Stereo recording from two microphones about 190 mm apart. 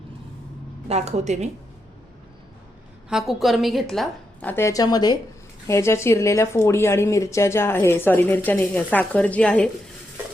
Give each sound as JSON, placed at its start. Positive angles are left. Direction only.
{"t": 0.9, "sound": "a woman's voice", "side_deg": -35}
{"t": 3.1, "sound": "a woman's voice", "side_deg": 0}